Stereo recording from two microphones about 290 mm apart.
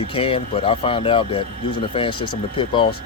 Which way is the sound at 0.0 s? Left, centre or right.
Centre.